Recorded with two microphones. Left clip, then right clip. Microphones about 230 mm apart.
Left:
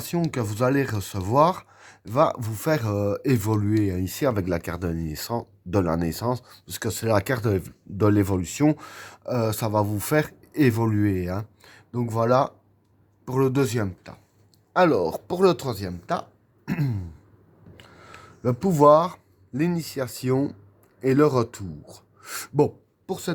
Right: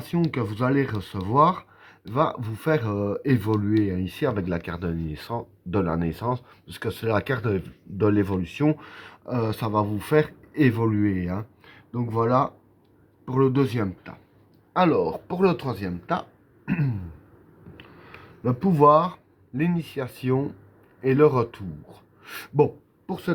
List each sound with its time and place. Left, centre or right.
0.3 s speech: left
18.4 s speech: left